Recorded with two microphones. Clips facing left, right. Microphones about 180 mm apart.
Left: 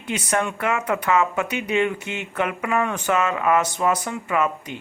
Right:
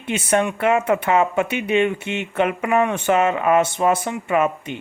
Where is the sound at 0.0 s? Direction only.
25° right (ahead or behind).